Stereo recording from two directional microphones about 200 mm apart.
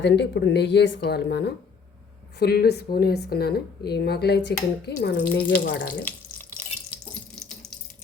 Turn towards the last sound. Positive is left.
turn(degrees=10)  # may be behind; listen again after turning